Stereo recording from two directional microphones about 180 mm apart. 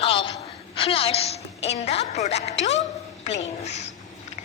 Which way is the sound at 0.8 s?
30° left (ahead or behind).